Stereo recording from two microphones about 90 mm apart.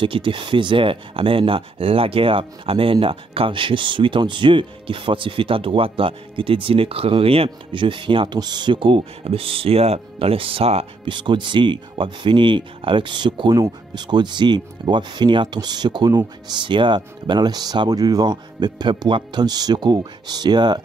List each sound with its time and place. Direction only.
0.0 s speech: 70° right (ahead or behind)
8.4 s speech: 50° right (ahead or behind)
16.5 s speech: 65° right (ahead or behind)